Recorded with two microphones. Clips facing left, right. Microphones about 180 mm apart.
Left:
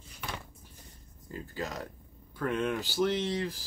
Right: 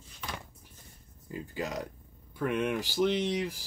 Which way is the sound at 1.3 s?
15° right (ahead or behind).